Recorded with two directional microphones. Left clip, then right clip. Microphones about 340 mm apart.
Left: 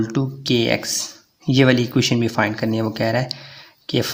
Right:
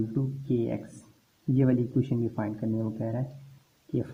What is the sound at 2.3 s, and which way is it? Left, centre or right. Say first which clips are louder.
Speech: left 13 dB; left.